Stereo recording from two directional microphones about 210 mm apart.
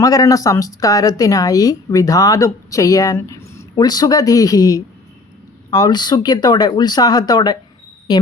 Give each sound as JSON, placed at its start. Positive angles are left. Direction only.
{"t": 0.0, "sound": "speech", "side_deg": 15}